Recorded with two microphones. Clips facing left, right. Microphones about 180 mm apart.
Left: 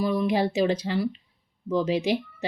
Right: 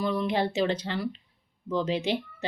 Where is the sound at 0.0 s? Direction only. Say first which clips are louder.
Left 3 dB; 10° left (ahead or behind).